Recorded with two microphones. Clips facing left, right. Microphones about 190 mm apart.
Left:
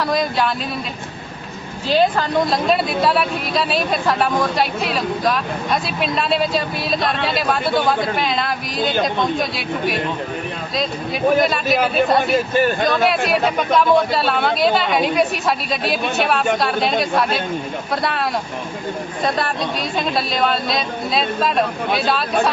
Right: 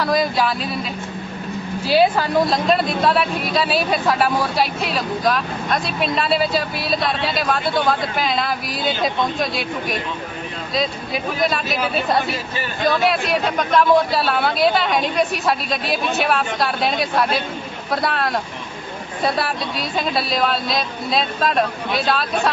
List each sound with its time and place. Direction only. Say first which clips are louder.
0.0 s speech: even; centre (ahead or behind)
1.9 s speech: even; 5° right (ahead or behind)
12.3 s speech: left 10 dB; 50° left (ahead or behind)
13.0 s speech: left 2 dB; centre (ahead or behind)